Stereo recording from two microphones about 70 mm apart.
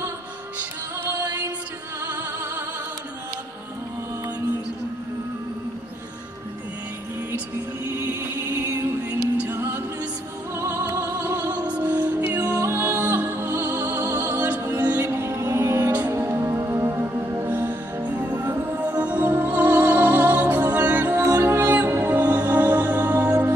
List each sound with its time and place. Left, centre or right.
0.6 s music: right
7.9 s music: right
10.5 s music: right
12.4 s music: right
15.0 s music: right
17.5 s music: right
21.2 s music: right